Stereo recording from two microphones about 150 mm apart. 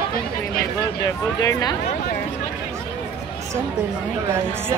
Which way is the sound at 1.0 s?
25° left (ahead or behind).